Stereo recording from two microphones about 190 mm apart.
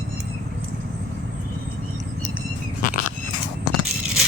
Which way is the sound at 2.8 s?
45° left (ahead or behind).